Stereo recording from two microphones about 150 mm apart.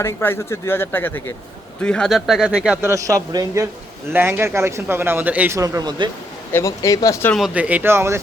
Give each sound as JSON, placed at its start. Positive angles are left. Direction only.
{"t": 0.0, "sound": "speech", "side_deg": 15}
{"t": 2.8, "sound": "a man's voice", "side_deg": -20}
{"t": 5.5, "sound": "a man's voice", "side_deg": -25}
{"t": 6.5, "sound": "speech", "side_deg": 20}
{"t": 7.3, "sound": "speech", "side_deg": -5}